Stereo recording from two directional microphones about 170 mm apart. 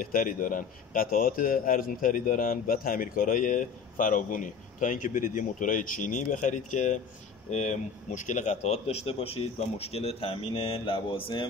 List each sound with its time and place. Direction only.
0.0 s speech: 55° left (ahead or behind); by 11.4 s 30° left (ahead or behind)